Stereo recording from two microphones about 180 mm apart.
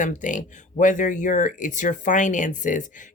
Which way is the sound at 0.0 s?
45° left (ahead or behind).